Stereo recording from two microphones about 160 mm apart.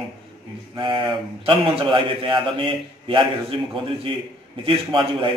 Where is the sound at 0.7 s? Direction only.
30° right (ahead or behind).